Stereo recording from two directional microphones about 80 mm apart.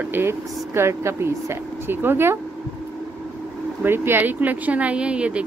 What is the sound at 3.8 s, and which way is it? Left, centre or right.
Speech, right.